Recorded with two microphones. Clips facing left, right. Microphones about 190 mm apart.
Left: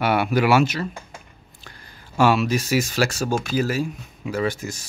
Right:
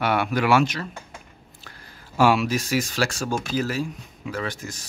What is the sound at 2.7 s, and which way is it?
Speech, 5° left (ahead or behind).